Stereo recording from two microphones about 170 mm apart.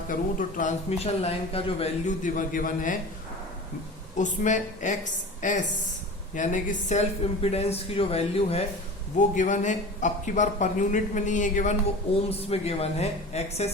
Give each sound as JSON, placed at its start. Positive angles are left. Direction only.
{"t": 0.1, "sound": "speech", "side_deg": 50}
{"t": 4.2, "sound": "speech", "side_deg": 45}
{"t": 7.4, "sound": "speech", "side_deg": 35}
{"t": 9.1, "sound": "speech", "side_deg": 45}
{"t": 12.3, "sound": "speech", "side_deg": 35}